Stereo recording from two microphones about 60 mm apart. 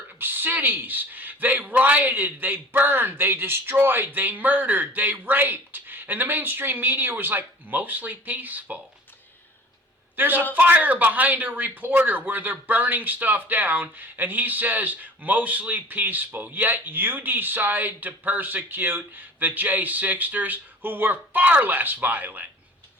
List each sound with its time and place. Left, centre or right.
0.2 s speech: right
10.2 s speech: right